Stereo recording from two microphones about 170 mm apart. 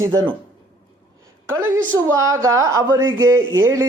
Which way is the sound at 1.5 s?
20° right (ahead or behind).